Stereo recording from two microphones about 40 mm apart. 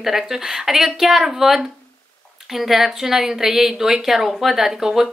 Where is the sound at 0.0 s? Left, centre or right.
Centre.